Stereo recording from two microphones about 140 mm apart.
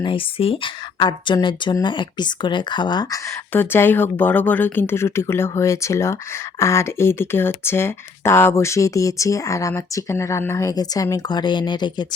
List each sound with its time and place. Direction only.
0.0 s speech: 40° left (ahead or behind)
3.5 s speech: 15° left (ahead or behind); by 12.0 s 30° left (ahead or behind)